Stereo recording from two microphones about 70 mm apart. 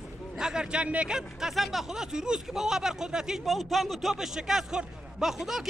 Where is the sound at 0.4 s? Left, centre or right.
Centre.